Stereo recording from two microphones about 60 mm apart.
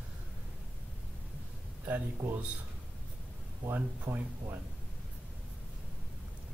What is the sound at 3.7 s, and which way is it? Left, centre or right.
Speech, right.